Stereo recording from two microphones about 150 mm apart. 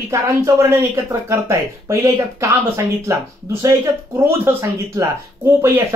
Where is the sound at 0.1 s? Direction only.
20° right (ahead or behind).